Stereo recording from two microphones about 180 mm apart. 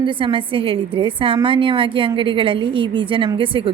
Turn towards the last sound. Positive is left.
turn(degrees=-30)  # may be behind; listen again after turning